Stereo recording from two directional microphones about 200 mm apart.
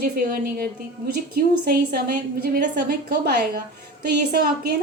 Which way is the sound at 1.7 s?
50° right (ahead or behind).